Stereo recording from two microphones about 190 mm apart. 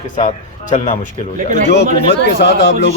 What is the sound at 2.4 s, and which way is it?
Speech, 60° left (ahead or behind).